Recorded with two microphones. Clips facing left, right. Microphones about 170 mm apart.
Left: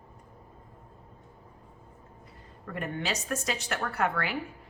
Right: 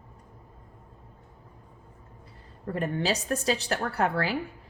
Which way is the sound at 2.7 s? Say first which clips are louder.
Right 5 dB; 35° right (ahead or behind).